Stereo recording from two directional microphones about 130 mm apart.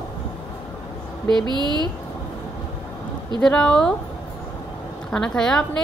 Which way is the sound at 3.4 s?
5° left (ahead or behind).